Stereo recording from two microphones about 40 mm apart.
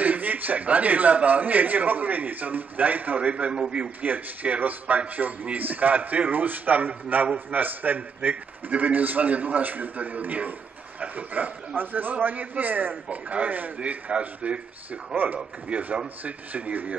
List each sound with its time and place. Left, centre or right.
0.0 s a man's voice: right
3.2 s a man's voice: right
4.0 s a man's voice: right